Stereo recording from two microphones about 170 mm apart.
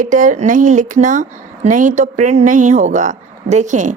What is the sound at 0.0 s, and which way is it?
Speech, 50° right (ahead or behind).